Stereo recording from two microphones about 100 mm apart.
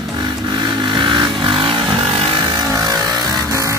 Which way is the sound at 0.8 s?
50° right (ahead or behind).